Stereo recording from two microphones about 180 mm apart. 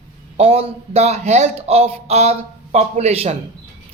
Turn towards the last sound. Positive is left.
turn(degrees=-35)  # may be behind; listen again after turning